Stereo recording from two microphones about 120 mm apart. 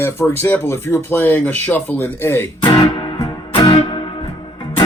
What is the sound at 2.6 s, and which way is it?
Music, 40° left (ahead or behind).